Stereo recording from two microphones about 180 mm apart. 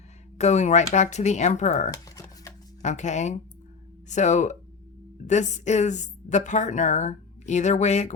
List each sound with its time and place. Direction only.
0.3 s a woman's voice: 40° left (ahead or behind)
1.9 s a sound: 20° left (ahead or behind)
2.8 s a woman's voice: 40° left (ahead or behind)